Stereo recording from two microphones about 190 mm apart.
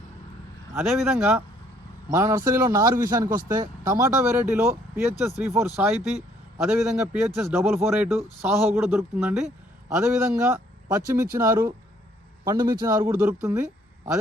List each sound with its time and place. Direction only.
0.7 s speech: 10° right (ahead or behind)